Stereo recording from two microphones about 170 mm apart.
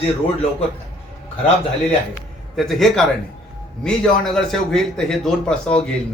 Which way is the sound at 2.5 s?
Centre (ahead or behind).